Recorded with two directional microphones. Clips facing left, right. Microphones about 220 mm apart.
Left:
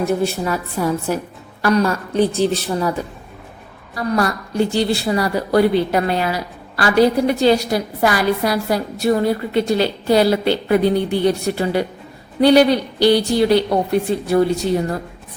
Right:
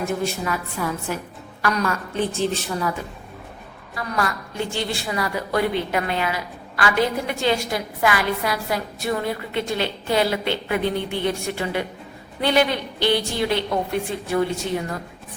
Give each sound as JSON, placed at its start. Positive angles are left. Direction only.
{"t": 0.0, "sound": "a woman's voice", "side_deg": 35}
{"t": 3.9, "sound": "a woman's voice", "side_deg": 35}